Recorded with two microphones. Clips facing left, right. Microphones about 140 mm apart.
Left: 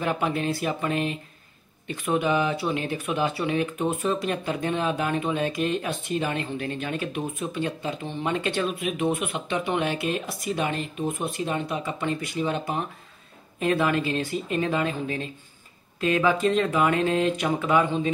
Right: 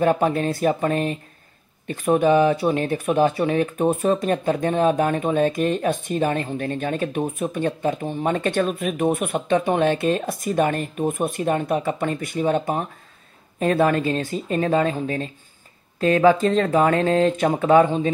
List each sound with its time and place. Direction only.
0.0 s speech: 45° right (ahead or behind)